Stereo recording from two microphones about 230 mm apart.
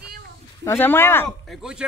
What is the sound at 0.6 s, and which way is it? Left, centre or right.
Speech, centre.